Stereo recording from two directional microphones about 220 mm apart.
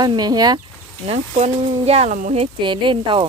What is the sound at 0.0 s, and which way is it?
Speech, 20° right (ahead or behind).